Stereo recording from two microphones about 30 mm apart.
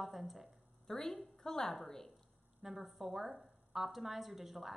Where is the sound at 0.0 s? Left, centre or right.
Centre.